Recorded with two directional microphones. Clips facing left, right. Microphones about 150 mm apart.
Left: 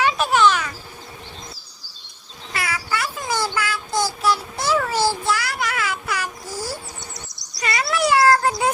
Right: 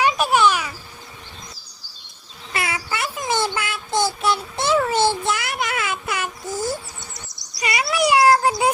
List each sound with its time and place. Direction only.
0.0 s a sound: 15° right (ahead or behind)
2.5 s child singing: 20° right (ahead or behind)
7.6 s bird: 15° right (ahead or behind)
7.9 s cat: 20° right (ahead or behind)